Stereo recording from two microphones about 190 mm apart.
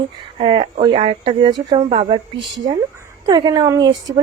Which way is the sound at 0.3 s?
30° right (ahead or behind).